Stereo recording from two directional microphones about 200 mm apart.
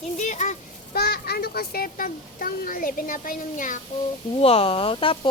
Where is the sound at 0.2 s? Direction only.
35° left (ahead or behind).